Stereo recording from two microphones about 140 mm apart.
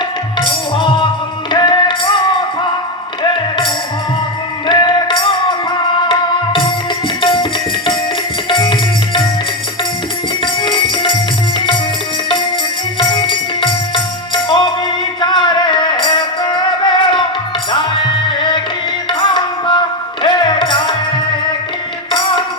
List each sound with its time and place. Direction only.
0.3 s music: 35° left (ahead or behind)
4.6 s music: 35° left (ahead or behind)
7.2 s tabla: 35° left (ahead or behind)
8.4 s music: 35° left (ahead or behind)
10.4 s music: 35° left (ahead or behind)
13.0 s music: 35° left (ahead or behind)